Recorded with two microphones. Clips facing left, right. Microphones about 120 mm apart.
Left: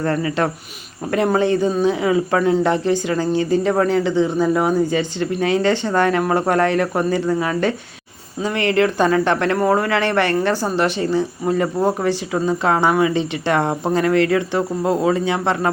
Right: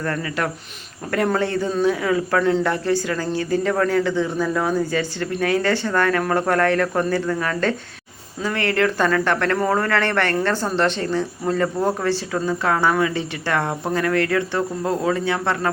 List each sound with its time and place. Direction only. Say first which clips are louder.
0.0 s a man's voice: left 5 dB; 25° left (ahead or behind)